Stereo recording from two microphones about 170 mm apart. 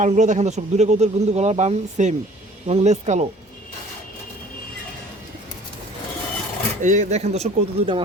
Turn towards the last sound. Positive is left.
turn(degrees=-35)  # may be behind; listen again after turning